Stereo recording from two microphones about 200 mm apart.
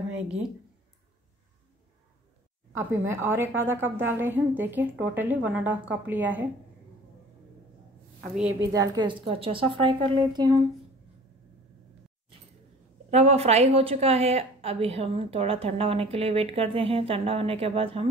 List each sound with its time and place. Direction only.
2.7 s a woman's voice: 15° right (ahead or behind)
8.7 s a woman's voice: 20° right (ahead or behind)
13.1 s a woman's voice: 30° right (ahead or behind)